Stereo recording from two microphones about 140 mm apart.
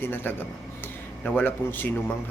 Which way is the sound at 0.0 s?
15° left (ahead or behind).